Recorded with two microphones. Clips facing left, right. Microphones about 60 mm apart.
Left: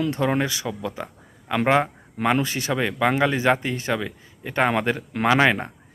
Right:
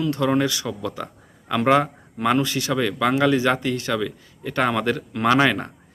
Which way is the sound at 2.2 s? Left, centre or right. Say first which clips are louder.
Right 1 dB; left.